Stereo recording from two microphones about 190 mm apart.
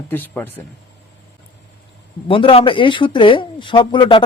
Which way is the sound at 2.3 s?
30° left (ahead or behind).